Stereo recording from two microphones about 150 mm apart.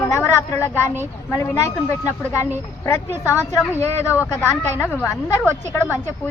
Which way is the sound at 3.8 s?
15° left (ahead or behind).